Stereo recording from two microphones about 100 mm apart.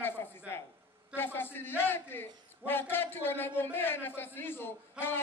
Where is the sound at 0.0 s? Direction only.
20° left (ahead or behind).